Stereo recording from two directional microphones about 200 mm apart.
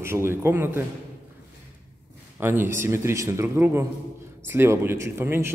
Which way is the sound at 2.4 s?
10° right (ahead or behind).